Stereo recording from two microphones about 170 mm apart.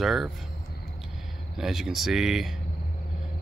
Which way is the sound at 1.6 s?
Centre (ahead or behind).